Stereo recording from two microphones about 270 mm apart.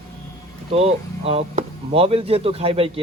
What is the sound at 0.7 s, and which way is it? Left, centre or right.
A man's voice, right.